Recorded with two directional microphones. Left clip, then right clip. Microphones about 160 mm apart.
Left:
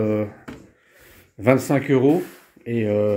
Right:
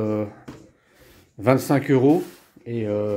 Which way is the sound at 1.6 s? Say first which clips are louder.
Even; 15° right (ahead or behind).